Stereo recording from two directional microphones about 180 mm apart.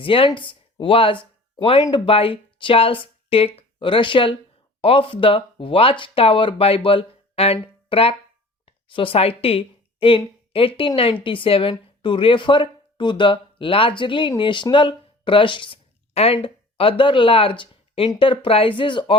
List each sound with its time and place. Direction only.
0.0 s a woman's voice: 30° left (ahead or behind)